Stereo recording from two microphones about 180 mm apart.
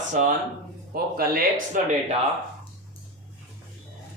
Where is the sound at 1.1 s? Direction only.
55° right (ahead or behind).